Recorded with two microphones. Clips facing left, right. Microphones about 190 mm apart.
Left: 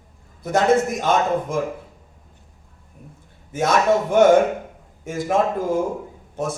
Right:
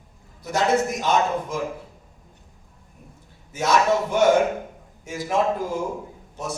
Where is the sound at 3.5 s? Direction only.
50° left (ahead or behind).